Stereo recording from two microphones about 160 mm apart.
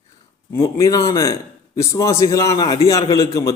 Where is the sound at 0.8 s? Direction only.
20° left (ahead or behind).